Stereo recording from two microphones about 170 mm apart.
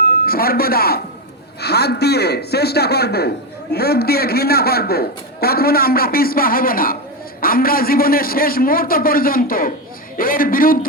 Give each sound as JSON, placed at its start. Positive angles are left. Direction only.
{"t": 0.3, "sound": "a man's voice", "side_deg": 60}